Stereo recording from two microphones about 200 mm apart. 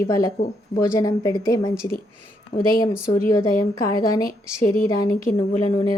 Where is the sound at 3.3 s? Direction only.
15° left (ahead or behind).